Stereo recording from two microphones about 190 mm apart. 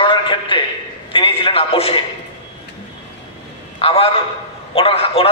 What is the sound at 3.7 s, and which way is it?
A man's voice, 30° left (ahead or behind).